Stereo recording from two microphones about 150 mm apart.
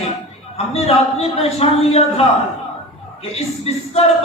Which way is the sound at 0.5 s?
45° left (ahead or behind).